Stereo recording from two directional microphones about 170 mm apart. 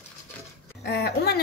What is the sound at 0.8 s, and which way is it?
Speech, 70° left (ahead or behind).